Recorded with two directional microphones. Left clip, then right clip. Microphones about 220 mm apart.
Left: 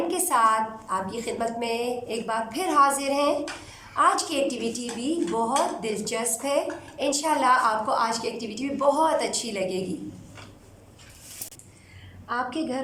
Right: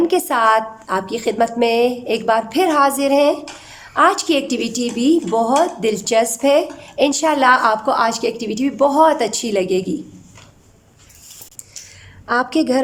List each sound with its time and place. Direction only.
0.1 s a woman's voice: 40° right (ahead or behind)
12.3 s a woman's voice: 50° right (ahead or behind)